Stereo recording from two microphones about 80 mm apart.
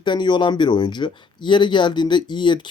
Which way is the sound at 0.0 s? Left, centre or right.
Left.